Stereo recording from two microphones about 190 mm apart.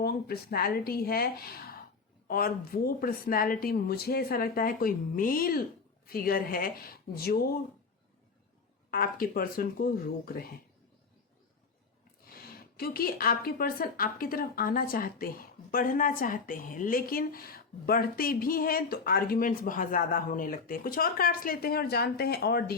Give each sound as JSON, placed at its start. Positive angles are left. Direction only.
{"t": 0.0, "sound": "a woman's voice", "side_deg": 55}
{"t": 8.9, "sound": "a woman's voice", "side_deg": 50}
{"t": 12.3, "sound": "a woman's voice", "side_deg": 55}